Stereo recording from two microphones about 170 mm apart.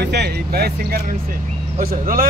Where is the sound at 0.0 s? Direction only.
75° right (ahead or behind).